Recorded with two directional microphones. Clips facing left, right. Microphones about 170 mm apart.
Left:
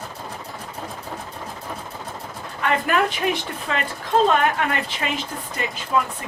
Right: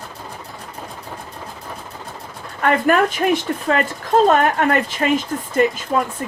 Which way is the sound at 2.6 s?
45° right (ahead or behind).